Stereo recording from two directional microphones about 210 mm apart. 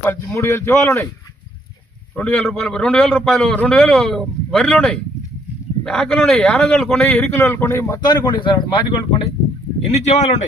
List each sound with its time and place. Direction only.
0.0 s a man's voice: 10° left (ahead or behind)
2.1 s a man's voice: 5° left (ahead or behind); by 10.4 s 35° left (ahead or behind)